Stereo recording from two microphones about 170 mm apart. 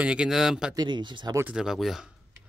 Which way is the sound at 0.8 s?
25° right (ahead or behind).